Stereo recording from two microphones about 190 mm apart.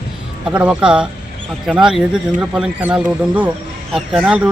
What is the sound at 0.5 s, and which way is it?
Speech, 5° right (ahead or behind).